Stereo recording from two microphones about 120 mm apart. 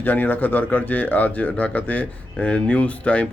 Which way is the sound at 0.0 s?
15° left (ahead or behind).